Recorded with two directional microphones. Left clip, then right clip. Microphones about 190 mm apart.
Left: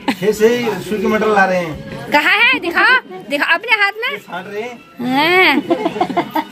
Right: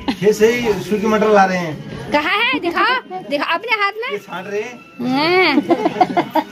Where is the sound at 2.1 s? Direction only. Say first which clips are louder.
Left 5 dB; 10° right (ahead or behind).